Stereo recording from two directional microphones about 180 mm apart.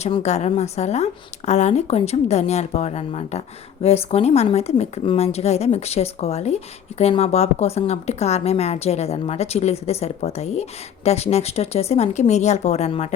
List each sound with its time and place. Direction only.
0.0 s a woman's voice: 40° left (ahead or behind)